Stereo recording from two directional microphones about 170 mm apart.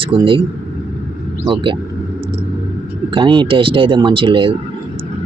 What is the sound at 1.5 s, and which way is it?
Speech, 30° right (ahead or behind).